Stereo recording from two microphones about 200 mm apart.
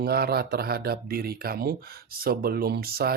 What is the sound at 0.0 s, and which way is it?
Speech, 50° right (ahead or behind).